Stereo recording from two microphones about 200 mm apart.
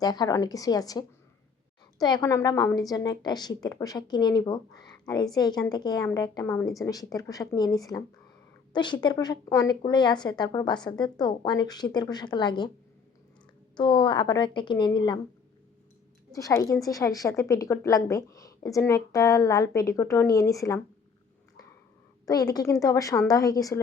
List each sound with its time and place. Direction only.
0.0 s a woman's voice: 20° left (ahead or behind)
13.7 s a woman's voice: 20° left (ahead or behind)
16.3 s a woman's voice: 15° left (ahead or behind)
22.3 s a woman's voice: 20° left (ahead or behind)